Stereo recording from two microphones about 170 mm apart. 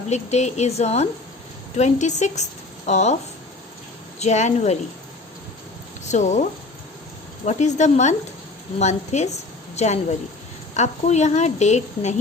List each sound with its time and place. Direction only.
0.1 s a woman's voice: 40° left (ahead or behind)
4.2 s a woman's voice: 45° left (ahead or behind)
6.1 s speech: 45° left (ahead or behind)
7.4 s a woman's voice: 45° left (ahead or behind)